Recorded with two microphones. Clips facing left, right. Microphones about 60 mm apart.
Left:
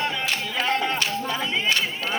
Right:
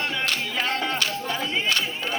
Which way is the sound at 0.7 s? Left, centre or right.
Left.